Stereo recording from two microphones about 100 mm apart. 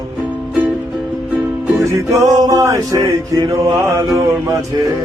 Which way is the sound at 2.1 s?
30° right (ahead or behind).